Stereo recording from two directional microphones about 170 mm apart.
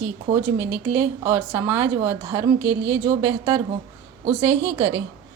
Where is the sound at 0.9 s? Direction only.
15° right (ahead or behind).